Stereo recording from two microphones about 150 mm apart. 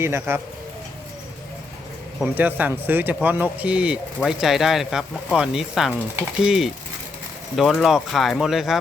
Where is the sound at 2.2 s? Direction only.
10° right (ahead or behind).